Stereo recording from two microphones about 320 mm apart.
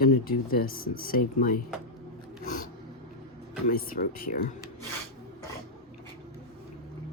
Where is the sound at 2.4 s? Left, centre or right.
Left.